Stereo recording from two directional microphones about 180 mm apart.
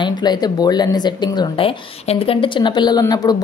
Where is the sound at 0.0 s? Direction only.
25° left (ahead or behind).